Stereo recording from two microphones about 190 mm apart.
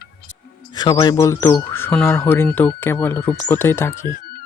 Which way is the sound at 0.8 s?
20° left (ahead or behind).